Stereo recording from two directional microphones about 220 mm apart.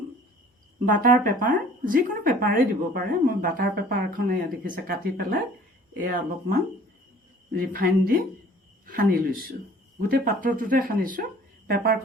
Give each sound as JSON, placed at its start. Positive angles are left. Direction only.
{"t": 0.9, "sound": "speech", "side_deg": -40}